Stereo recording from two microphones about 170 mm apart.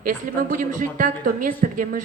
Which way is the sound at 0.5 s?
55° right (ahead or behind).